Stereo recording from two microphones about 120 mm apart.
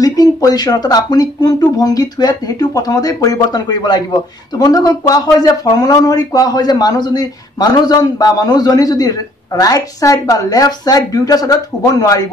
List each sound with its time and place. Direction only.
0.0 s speech: 30° left (ahead or behind)